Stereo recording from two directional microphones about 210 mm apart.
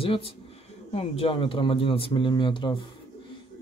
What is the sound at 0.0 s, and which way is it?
Speech, 25° left (ahead or behind).